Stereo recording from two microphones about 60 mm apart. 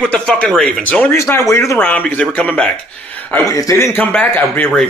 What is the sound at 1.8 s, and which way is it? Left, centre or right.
Speech, left.